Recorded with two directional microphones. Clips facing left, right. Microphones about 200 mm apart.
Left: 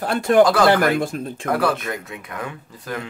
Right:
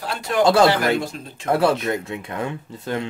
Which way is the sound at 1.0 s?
50° left (ahead or behind).